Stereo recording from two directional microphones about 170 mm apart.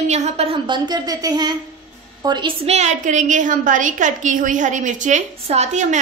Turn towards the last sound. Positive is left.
turn(degrees=-40)  # may be behind; listen again after turning